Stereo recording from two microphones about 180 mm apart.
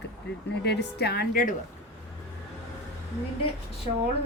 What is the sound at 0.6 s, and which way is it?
Speech, 65° left (ahead or behind).